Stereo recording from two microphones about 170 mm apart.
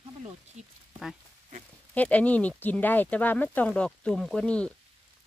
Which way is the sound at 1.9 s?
10° left (ahead or behind).